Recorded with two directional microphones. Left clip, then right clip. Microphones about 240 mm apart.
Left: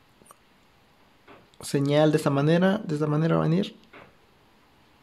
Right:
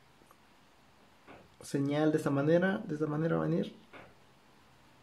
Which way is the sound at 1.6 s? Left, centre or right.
Left.